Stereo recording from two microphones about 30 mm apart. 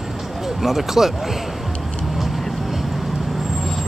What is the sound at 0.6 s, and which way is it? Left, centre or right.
Speech, centre.